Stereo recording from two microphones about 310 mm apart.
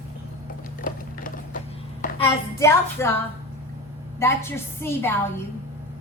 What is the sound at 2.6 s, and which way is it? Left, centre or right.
Speech, centre.